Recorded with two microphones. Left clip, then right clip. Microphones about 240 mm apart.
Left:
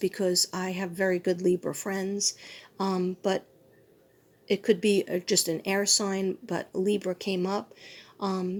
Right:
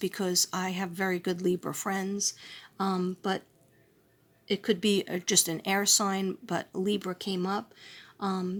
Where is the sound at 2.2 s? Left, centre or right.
Right.